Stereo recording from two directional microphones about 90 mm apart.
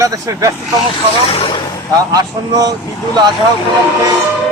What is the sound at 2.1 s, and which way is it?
Speech, 45° right (ahead or behind).